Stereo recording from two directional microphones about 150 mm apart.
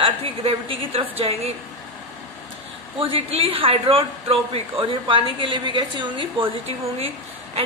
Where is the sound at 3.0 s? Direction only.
40° right (ahead or behind).